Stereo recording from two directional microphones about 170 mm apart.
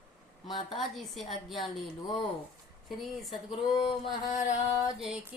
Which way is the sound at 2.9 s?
Centre (ahead or behind).